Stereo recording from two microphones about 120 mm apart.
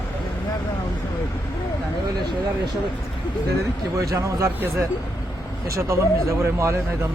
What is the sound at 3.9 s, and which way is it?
Speech, 25° right (ahead or behind).